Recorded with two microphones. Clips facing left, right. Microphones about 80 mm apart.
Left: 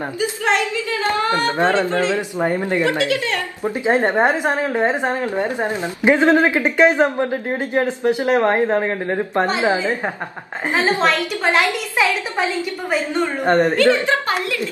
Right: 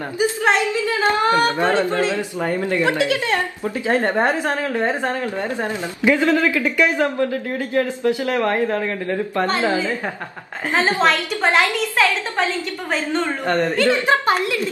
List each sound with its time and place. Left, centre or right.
0.2 s a woman's voice: right
1.6 s a woman's voice: left
2.8 s a woman's voice: right
3.6 s a woman's voice: left
9.5 s a woman's voice: centre
11.1 s a woman's voice: centre
12.9 s a woman's voice: centre